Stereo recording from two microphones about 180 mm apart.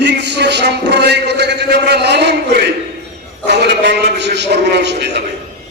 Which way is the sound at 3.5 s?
70° right (ahead or behind).